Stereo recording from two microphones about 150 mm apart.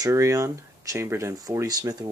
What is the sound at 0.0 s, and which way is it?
Speech, 20° right (ahead or behind).